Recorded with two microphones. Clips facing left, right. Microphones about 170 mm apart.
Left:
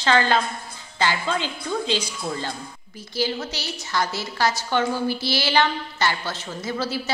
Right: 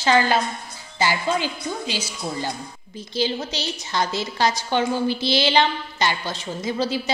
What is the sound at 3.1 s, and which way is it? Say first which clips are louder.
A woman's voice: right 2 dB; 20° right (ahead or behind).